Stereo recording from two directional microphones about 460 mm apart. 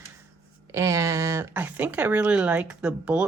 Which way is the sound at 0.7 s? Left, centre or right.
Centre.